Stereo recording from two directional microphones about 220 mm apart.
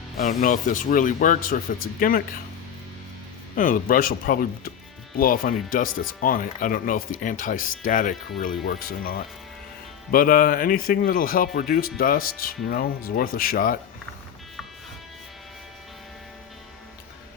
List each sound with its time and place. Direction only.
0.2 s speech: 35° left (ahead or behind)
3.5 s speech: 40° left (ahead or behind)